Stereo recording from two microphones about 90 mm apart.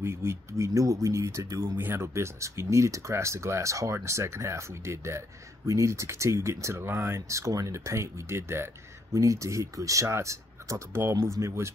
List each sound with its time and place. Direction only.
0.0 s speech: 30° right (ahead or behind)
1.8 s speech: 25° right (ahead or behind)